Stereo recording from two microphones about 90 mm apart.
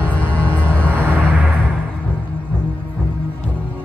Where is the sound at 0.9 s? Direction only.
25° right (ahead or behind).